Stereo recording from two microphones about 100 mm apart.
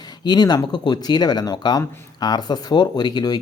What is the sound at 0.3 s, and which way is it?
Speech, 45° left (ahead or behind).